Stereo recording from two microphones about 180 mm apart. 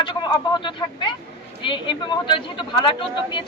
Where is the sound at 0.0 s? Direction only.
25° left (ahead or behind).